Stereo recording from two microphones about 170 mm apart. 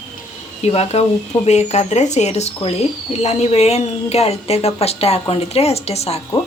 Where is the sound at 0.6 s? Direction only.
40° left (ahead or behind).